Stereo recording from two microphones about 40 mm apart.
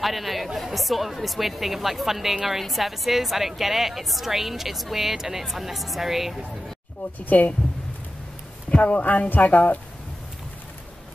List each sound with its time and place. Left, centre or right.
0.0 s a woman's voice: centre
7.2 s speech: left
8.6 s speech: left